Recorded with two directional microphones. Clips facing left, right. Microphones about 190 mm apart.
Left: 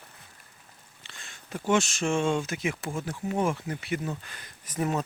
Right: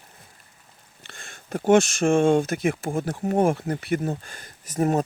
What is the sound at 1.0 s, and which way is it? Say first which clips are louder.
Speech: right 5 dB; 50° right (ahead or behind).